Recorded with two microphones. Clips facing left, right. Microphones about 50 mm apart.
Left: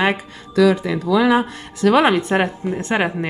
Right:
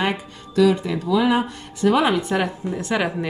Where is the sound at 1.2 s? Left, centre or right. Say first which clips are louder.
Left 3 dB; left.